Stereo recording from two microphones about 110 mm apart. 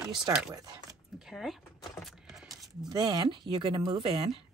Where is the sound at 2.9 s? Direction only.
35° right (ahead or behind).